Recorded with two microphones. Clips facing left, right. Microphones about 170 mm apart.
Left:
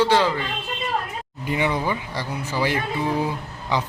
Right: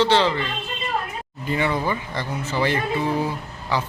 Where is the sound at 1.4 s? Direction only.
15° left (ahead or behind).